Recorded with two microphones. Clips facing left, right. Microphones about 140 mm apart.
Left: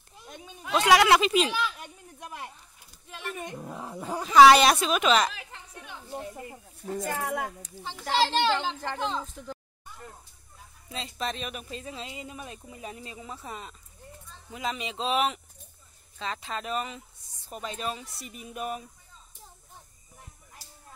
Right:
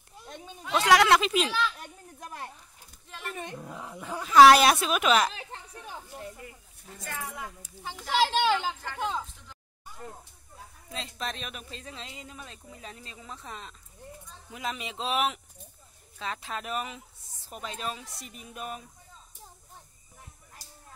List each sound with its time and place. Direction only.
0.2 s a sound: 5° left (ahead or behind)
1.5 s a sound: 10° left (ahead or behind)
3.4 s dog: 15° left (ahead or behind)
3.8 s dog: 30° left (ahead or behind)
4.2 s speech: centre (ahead or behind)
5.3 s a sound: 35° right (ahead or behind)
6.8 s speech: 50° left (ahead or behind)
7.2 s speech: 70° left (ahead or behind)
7.6 s speech: 10° right (ahead or behind)
10.9 s speech: centre (ahead or behind)